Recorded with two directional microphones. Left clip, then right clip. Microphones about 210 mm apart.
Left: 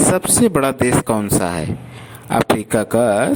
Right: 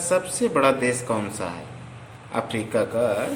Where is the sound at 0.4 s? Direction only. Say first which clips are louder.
Left 3 dB; 50° left (ahead or behind).